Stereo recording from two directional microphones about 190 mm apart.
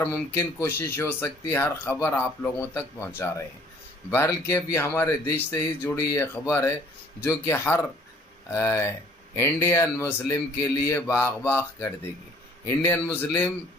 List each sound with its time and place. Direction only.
0.0 s speech: 10° left (ahead or behind)